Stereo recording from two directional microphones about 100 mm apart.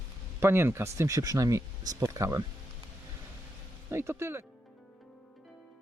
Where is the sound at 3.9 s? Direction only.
25° right (ahead or behind).